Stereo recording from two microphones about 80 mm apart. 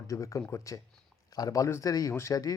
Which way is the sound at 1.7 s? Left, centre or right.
Left.